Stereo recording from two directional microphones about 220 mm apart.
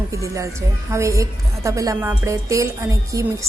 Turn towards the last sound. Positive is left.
turn(degrees=-15)  # may be behind; listen again after turning